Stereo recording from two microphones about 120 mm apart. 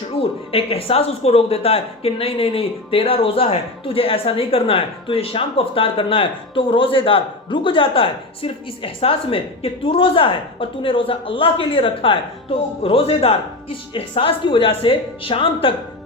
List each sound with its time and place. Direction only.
0.2 s speech: 55° left (ahead or behind)